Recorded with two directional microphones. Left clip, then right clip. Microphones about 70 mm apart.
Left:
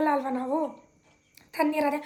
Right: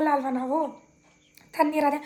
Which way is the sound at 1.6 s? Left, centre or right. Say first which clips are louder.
Right 3 dB; left.